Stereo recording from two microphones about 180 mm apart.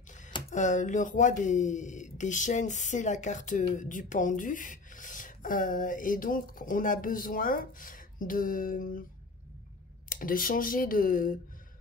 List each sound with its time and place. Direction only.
0.6 s speech: 45° left (ahead or behind)
10.0 s speech: 50° left (ahead or behind)